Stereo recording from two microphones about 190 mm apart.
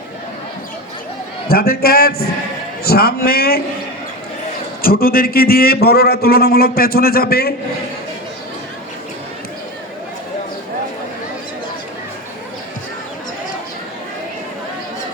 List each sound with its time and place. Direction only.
1.5 s a man's voice: 50° left (ahead or behind)
4.8 s a man's voice: 50° left (ahead or behind)